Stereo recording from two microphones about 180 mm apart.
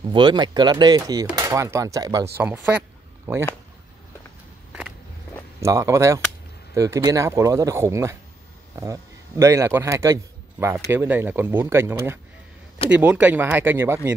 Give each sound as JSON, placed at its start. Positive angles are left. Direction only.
{"t": 0.0, "sound": "a man's voice", "side_deg": -25}
{"t": 5.6, "sound": "a man's voice", "side_deg": -15}